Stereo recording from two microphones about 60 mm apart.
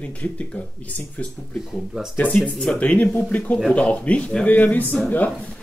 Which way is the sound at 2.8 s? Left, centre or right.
Left.